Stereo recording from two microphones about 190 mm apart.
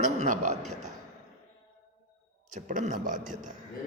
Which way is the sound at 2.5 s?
40° right (ahead or behind).